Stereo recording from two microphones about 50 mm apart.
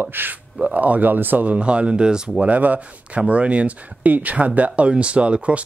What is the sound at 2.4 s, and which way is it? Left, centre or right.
Speech, right.